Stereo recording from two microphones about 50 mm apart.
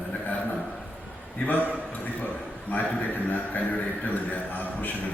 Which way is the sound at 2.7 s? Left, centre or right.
Left.